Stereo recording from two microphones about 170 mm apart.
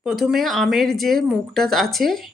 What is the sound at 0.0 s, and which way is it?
Speech, centre (ahead or behind).